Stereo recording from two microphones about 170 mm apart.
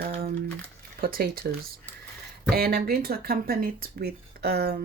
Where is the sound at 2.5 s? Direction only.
60° right (ahead or behind).